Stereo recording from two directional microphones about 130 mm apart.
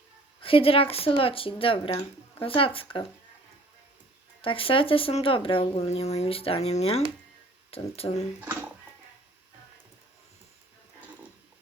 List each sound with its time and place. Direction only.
0.4 s speech: 45° left (ahead or behind)
4.4 s speech: 45° left (ahead or behind)